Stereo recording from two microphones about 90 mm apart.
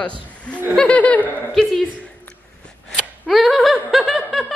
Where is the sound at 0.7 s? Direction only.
15° left (ahead or behind).